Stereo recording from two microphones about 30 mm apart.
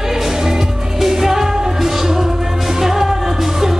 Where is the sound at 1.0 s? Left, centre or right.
Centre.